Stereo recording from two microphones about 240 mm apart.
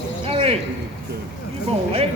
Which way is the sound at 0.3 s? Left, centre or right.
Right.